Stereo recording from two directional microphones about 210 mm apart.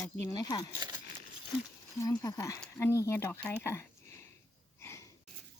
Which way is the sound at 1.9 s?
15° left (ahead or behind).